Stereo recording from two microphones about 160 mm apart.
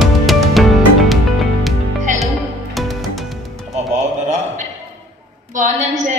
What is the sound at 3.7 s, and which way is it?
Music, 50° right (ahead or behind).